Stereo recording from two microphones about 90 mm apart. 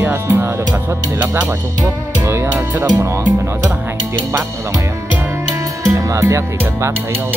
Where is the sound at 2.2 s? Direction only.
30° right (ahead or behind).